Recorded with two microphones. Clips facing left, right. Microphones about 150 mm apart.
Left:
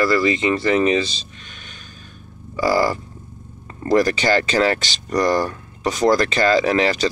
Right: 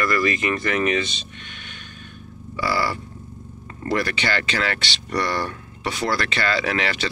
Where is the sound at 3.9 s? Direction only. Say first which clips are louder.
Left 7 dB; 40° left (ahead or behind).